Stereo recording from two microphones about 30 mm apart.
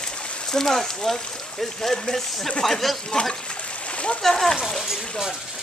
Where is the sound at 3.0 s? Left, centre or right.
Left.